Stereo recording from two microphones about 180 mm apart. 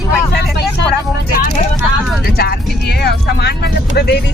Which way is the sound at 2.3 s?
60° left (ahead or behind).